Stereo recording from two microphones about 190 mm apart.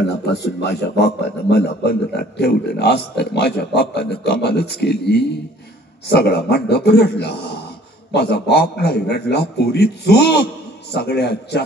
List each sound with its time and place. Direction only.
0.2 s a man's voice: 60° left (ahead or behind)